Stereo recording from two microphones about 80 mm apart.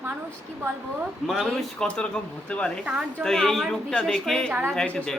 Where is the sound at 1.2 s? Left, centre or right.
Centre.